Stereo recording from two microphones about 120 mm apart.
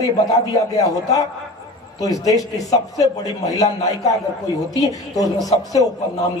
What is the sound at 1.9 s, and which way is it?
A woman's voice, 30° left (ahead or behind).